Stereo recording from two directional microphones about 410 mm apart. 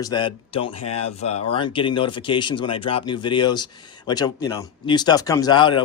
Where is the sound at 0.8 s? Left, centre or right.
Left.